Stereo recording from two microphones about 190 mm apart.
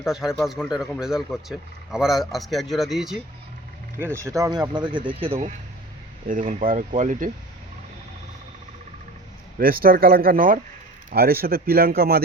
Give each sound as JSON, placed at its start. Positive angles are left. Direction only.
{"t": 0.0, "sound": "speech", "side_deg": 0}
{"t": 3.9, "sound": "speech", "side_deg": -15}
{"t": 9.6, "sound": "speech", "side_deg": -50}